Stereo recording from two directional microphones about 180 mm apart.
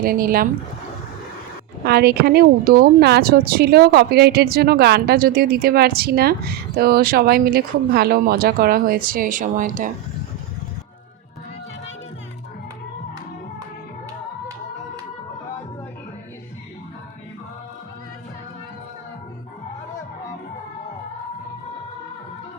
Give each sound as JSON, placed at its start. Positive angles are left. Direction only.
{"t": 0.0, "sound": "speech", "side_deg": -55}
{"t": 1.8, "sound": "a woman's voice", "side_deg": -60}